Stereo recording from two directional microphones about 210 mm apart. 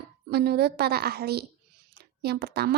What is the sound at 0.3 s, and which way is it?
A woman's voice, 50° right (ahead or behind).